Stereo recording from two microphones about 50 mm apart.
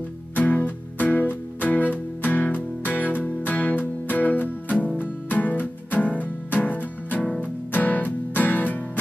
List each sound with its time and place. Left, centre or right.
0.4 s music: left